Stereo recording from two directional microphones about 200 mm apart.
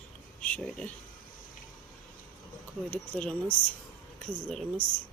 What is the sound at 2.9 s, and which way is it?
Speech, 5° left (ahead or behind).